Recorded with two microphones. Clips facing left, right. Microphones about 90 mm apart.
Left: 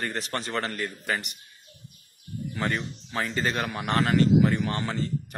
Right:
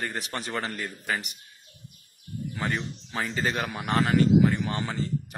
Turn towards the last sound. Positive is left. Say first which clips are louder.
# left 1 dB
turn(degrees=-10)  # may be behind; listen again after turning